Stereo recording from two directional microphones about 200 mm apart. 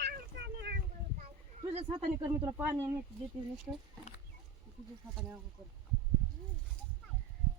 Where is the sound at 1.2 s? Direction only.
30° right (ahead or behind).